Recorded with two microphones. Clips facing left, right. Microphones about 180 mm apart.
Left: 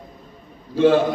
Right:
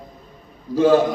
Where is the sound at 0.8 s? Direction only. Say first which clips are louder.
Right 1 dB; 40° right (ahead or behind).